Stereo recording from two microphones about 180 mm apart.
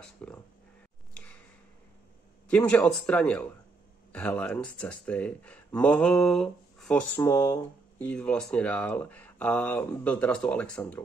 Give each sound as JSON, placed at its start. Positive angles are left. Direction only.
{"t": 0.0, "sound": "speech", "side_deg": 5}
{"t": 1.1, "sound": "a sound", "side_deg": 5}
{"t": 2.4, "sound": "speech", "side_deg": 5}
{"t": 7.2, "sound": "speech", "side_deg": 15}